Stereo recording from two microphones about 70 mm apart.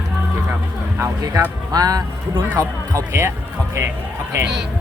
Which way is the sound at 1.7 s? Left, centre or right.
Right.